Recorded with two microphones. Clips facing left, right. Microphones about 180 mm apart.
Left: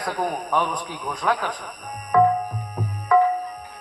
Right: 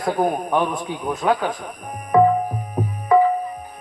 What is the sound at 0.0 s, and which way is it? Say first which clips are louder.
A man's voice: right 6 dB; 25° right (ahead or behind).